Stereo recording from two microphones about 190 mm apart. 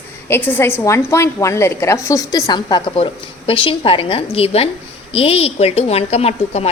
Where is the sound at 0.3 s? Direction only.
10° left (ahead or behind).